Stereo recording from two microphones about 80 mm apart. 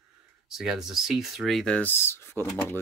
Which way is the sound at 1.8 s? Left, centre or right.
Left.